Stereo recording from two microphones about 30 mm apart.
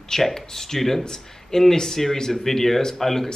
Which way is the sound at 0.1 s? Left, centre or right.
Centre.